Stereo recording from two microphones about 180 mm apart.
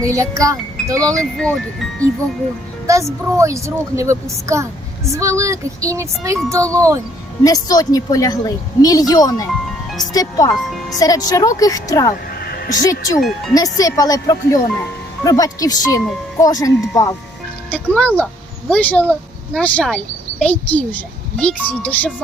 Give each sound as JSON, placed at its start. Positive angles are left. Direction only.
{"t": 0.0, "sound": "speech", "side_deg": -20}
{"t": 0.9, "sound": "speech", "side_deg": 5}
{"t": 2.8, "sound": "speech", "side_deg": -15}
{"t": 7.4, "sound": "a woman's voice", "side_deg": 20}
{"t": 12.3, "sound": "a sound", "side_deg": 55}
{"t": 12.8, "sound": "a woman's voice", "side_deg": 20}
{"t": 13.1, "sound": "speech", "side_deg": 0}
{"t": 13.5, "sound": "a woman's voice", "side_deg": 20}